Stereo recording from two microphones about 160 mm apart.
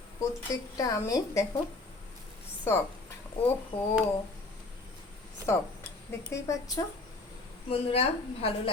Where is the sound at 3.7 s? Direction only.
35° left (ahead or behind).